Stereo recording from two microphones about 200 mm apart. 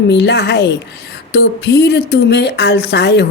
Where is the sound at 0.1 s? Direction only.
55° left (ahead or behind).